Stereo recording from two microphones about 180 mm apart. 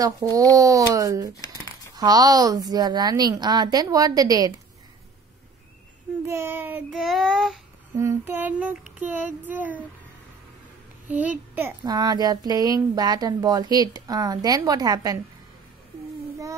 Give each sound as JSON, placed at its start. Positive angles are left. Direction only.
{"t": 0.0, "sound": "a child's voice", "side_deg": -20}
{"t": 6.2, "sound": "speech", "side_deg": -15}
{"t": 6.9, "sound": "child singing", "side_deg": 0}
{"t": 8.0, "sound": "speech", "side_deg": -15}
{"t": 11.1, "sound": "a child's voice", "side_deg": -10}